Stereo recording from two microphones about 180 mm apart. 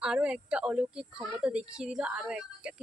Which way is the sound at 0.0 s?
5° right (ahead or behind).